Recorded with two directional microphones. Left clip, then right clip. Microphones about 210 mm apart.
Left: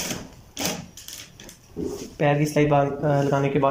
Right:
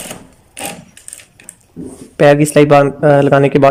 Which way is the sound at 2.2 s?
55° right (ahead or behind).